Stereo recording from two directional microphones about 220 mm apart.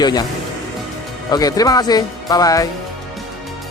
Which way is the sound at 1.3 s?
15° left (ahead or behind).